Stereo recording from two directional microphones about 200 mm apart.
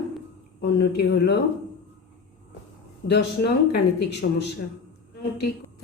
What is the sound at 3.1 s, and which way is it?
Speech, 55° left (ahead or behind).